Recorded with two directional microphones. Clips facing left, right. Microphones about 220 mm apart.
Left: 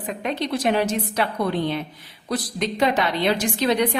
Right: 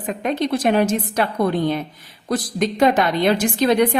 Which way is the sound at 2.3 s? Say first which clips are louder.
Right 4 dB; 50° right (ahead or behind).